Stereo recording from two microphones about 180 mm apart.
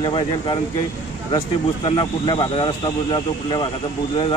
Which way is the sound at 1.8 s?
25° left (ahead or behind).